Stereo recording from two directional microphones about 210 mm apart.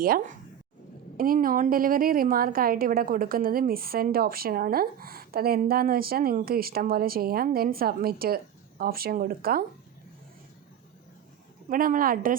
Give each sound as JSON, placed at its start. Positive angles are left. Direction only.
{"t": 0.0, "sound": "a woman's voice", "side_deg": -45}
{"t": 11.7, "sound": "a woman's voice", "side_deg": -40}